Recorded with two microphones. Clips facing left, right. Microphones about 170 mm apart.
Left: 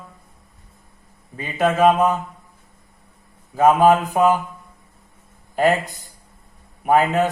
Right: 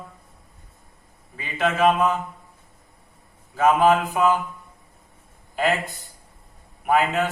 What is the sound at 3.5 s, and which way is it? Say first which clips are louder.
Mantra: left 4 dB; 40° left (ahead or behind).